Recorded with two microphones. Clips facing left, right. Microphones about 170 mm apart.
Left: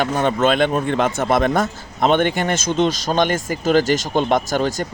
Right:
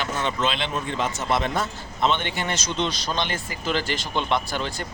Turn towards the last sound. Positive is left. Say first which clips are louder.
# left 8 dB
turn(degrees=45)  # may be behind; listen again after turning